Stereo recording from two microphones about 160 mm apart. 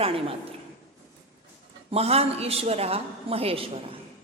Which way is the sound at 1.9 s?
40° right (ahead or behind).